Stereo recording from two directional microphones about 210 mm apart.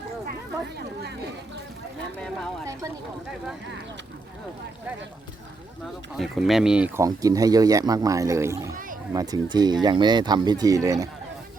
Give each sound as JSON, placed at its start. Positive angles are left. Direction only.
{"t": 2.1, "sound": "speech", "side_deg": 5}
{"t": 6.1, "sound": "speech", "side_deg": 0}